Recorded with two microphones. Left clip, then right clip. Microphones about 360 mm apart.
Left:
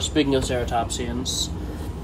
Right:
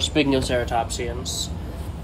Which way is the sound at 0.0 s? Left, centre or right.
Right.